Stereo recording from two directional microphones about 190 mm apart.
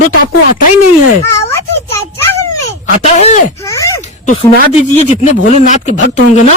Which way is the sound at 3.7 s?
15° left (ahead or behind).